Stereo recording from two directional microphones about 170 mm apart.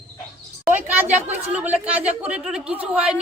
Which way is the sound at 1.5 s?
10° right (ahead or behind).